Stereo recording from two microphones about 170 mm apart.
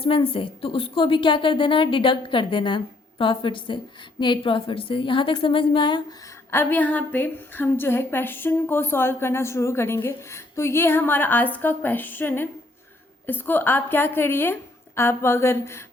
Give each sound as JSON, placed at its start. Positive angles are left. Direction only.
{"t": 0.0, "sound": "a woman's voice", "side_deg": 30}
{"t": 6.5, "sound": "a woman's voice", "side_deg": 10}